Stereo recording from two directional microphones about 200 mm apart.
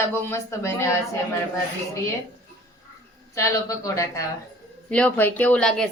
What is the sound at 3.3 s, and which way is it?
Speech, 15° left (ahead or behind).